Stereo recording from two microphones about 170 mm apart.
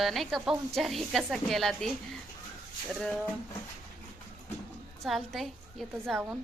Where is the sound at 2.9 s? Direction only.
5° left (ahead or behind).